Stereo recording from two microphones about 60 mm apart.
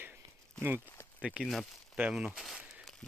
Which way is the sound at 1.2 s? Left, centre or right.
Centre.